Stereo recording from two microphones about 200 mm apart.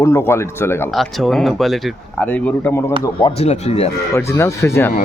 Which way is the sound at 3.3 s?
30° left (ahead or behind).